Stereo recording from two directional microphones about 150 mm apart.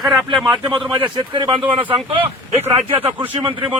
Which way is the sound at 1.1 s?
30° right (ahead or behind).